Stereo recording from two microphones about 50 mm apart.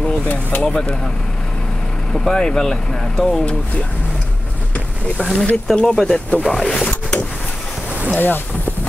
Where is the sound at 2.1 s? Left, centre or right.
Centre.